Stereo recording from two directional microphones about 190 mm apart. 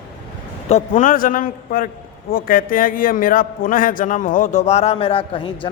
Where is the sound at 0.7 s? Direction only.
45° left (ahead or behind).